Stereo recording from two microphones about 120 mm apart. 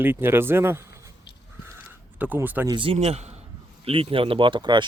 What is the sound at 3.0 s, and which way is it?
Speech, 65° right (ahead or behind).